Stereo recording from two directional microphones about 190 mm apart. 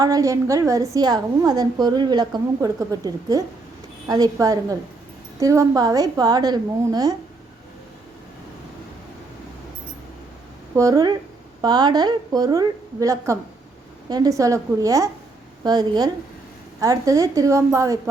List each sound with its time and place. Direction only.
0.0 s a woman's voice: 20° right (ahead or behind)
10.8 s a woman's voice: 15° right (ahead or behind)